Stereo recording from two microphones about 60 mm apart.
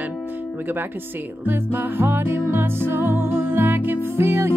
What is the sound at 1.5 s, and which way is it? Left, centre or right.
Music, right.